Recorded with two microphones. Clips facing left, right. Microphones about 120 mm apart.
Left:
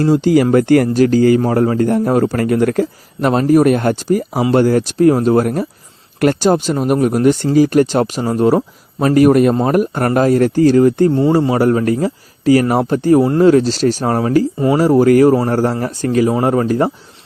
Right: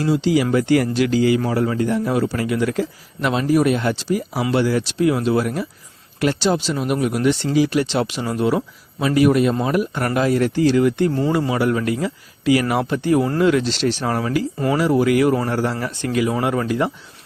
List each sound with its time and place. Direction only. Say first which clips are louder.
0.0 s a man's voice: left 6 dB; 45° left (ahead or behind)